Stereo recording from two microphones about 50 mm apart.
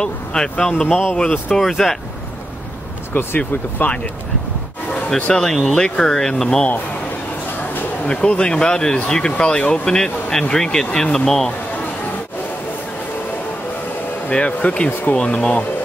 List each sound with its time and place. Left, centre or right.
0.0 s speech: centre
1.6 s speech: centre
3.3 s speech: left
5.3 s speech: centre
5.8 s speech: centre
8.0 s speech: left
14.3 s speech: left
14.9 s speech: left
15.1 s speech: left